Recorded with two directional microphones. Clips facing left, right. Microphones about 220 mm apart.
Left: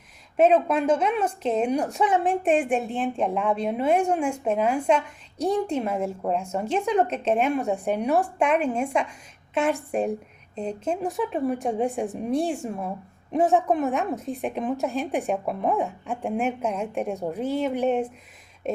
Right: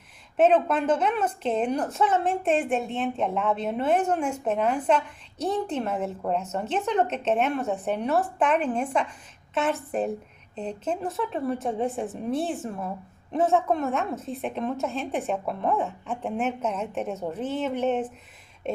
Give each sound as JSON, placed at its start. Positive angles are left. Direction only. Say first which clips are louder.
{"t": 0.3, "sound": "a woman's voice", "louder": "left 1 dB", "side_deg": 10}
{"t": 2.8, "sound": "a woman's voice", "louder": "left 2 dB", "side_deg": 0}